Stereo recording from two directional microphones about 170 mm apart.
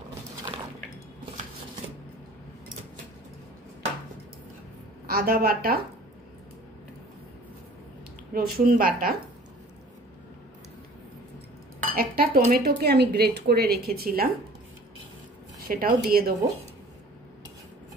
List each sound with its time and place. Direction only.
5.0 s a woman's voice: 60° right (ahead or behind)
8.3 s speech: 60° right (ahead or behind)
11.9 s speech: 60° right (ahead or behind)
15.7 s speech: 55° right (ahead or behind)